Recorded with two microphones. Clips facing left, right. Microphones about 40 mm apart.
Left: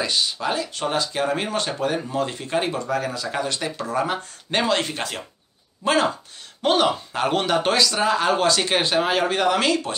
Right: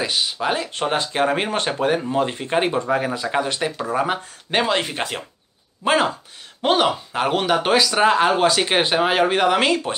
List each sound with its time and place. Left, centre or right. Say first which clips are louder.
0.0 s speech: right 1 dB; centre
7.9 s speech: right 4 dB; right